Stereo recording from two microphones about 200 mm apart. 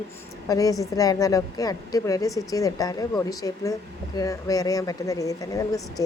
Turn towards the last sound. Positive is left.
turn(degrees=15)  # may be behind; listen again after turning